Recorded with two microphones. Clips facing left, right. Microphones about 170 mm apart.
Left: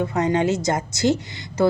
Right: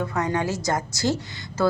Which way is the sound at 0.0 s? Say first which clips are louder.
Left 5 dB; 20° left (ahead or behind).